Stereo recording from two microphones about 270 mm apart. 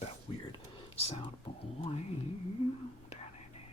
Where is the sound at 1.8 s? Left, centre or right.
Left.